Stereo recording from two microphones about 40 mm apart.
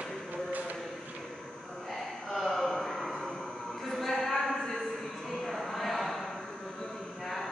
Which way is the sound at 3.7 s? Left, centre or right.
Centre.